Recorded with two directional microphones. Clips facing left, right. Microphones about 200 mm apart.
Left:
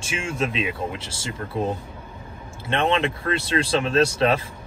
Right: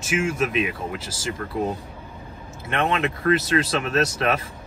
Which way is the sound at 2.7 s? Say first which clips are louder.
Left 2 dB; 30° left (ahead or behind).